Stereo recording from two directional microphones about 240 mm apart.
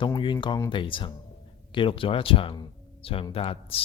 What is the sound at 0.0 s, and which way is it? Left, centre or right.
Speech, centre.